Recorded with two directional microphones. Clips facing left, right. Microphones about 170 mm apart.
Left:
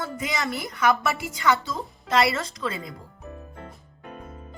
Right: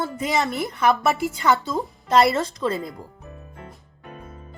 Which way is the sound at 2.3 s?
40° right (ahead or behind).